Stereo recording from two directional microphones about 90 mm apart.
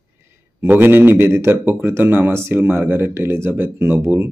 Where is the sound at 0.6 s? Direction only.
25° right (ahead or behind).